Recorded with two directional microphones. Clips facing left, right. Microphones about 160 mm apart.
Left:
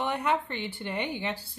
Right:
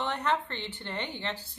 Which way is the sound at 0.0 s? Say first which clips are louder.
Left 2 dB; 10° left (ahead or behind).